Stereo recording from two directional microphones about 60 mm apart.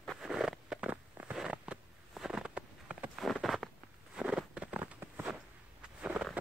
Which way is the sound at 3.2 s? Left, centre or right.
Centre.